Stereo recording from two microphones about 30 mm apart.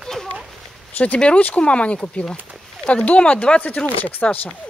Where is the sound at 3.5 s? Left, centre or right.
Left.